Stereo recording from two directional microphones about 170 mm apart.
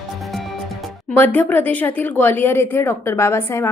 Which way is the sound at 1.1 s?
10° left (ahead or behind).